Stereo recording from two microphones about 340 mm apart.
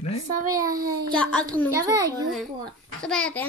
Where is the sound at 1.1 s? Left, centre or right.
Centre.